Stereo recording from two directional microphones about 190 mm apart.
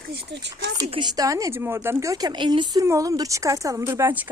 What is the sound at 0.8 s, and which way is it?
Speech, 25° right (ahead or behind).